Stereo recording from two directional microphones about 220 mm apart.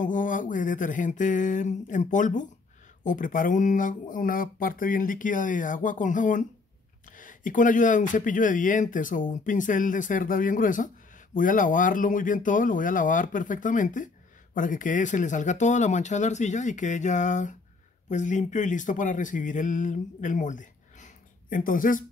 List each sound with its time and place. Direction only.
0.0 s speech: 35° left (ahead or behind)